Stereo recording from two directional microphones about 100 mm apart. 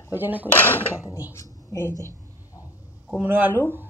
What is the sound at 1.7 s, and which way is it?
Speech, 35° left (ahead or behind).